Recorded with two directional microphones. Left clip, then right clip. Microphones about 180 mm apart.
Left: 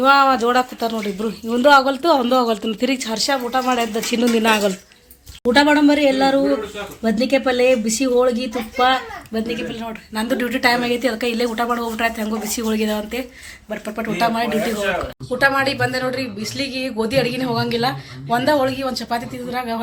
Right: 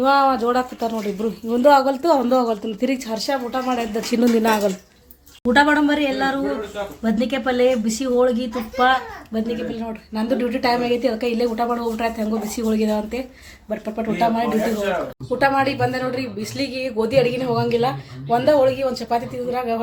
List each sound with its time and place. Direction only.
0.0 s speech: centre (ahead or behind)
4.1 s speech: 10° right (ahead or behind)
5.5 s speech: 30° left (ahead or behind)
9.3 s speech: 10° left (ahead or behind)
9.7 s speech: centre (ahead or behind)
15.4 s speech: centre (ahead or behind)